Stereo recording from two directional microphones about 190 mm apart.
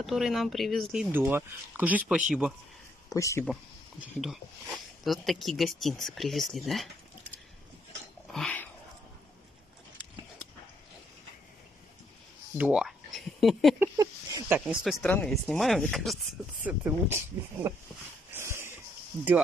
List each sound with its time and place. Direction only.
0.0 s speech: centre (ahead or behind)
1.0 s speech: 10° right (ahead or behind)
3.2 s speech: 15° left (ahead or behind)
4.0 s speech: centre (ahead or behind)
8.3 s dog: 5° left (ahead or behind)
12.5 s speech: 5° right (ahead or behind)
13.7 s a sound: 15° right (ahead or behind)
14.6 s speech: centre (ahead or behind)
16.6 s speech: 10° right (ahead or behind)
18.3 s a sound: 15° right (ahead or behind)